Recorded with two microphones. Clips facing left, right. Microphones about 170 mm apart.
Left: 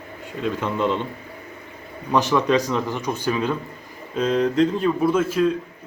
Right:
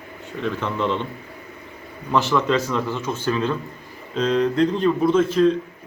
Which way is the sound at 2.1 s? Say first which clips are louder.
Left 1 dB; 15° left (ahead or behind).